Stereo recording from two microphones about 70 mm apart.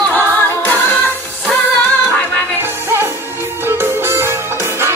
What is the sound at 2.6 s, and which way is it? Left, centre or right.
Music, right.